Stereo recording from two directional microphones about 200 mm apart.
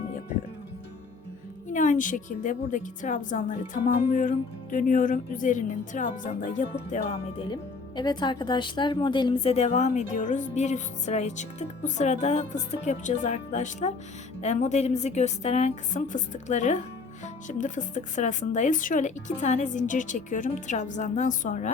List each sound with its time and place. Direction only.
1.7 s speech: 40° left (ahead or behind)
7.1 s speech: 20° left (ahead or behind); by 21.7 s 40° left (ahead or behind)